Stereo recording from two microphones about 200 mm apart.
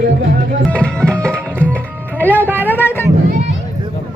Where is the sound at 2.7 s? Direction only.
10° left (ahead or behind).